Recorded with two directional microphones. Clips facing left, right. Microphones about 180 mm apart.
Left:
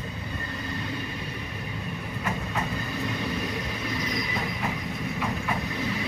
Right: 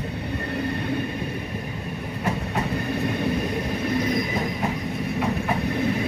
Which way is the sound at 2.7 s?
55° right (ahead or behind).